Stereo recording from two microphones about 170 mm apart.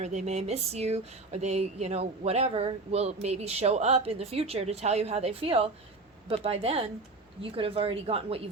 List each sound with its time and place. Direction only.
0.0 s speech: 45° right (ahead or behind)